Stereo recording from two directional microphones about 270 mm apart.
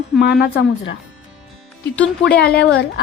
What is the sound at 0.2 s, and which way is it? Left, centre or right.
Speech, left.